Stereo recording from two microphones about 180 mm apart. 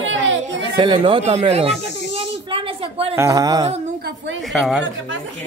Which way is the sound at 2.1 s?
30° right (ahead or behind).